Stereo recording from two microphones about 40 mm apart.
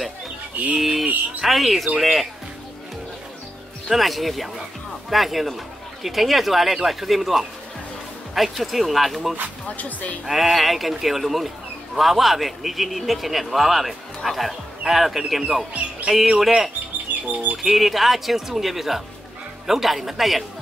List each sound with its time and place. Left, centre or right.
0.7 s speech: centre
3.9 s speech: centre
9.8 s speech: left
10.2 s speech: centre
17.3 s speech: right
17.6 s speech: centre